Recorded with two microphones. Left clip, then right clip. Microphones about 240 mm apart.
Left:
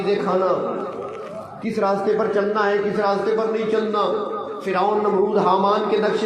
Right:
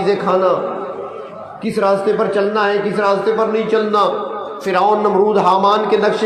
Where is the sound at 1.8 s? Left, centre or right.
Right.